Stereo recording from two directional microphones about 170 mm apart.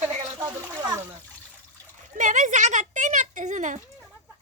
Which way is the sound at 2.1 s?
45° right (ahead or behind).